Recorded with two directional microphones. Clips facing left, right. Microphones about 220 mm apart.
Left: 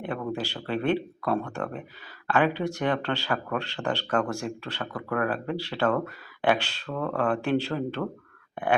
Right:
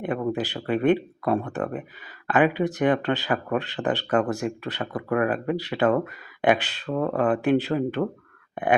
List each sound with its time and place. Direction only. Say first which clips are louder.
0.0 s speech: right 5 dB; 20° right (ahead or behind)